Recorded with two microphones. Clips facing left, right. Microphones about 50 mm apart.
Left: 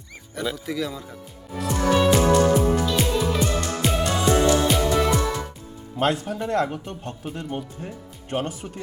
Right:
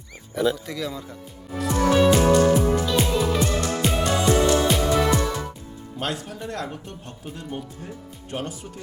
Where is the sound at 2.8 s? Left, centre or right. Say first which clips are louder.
Right 1 dB; centre.